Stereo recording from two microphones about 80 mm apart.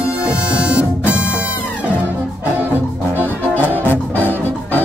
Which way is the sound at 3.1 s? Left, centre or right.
Left.